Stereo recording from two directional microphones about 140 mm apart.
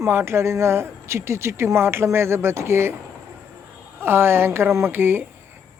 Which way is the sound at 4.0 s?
15° right (ahead or behind).